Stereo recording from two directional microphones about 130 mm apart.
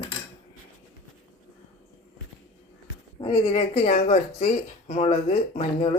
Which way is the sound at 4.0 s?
65° left (ahead or behind).